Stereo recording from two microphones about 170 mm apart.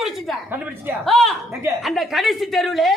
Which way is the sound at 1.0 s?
Centre (ahead or behind).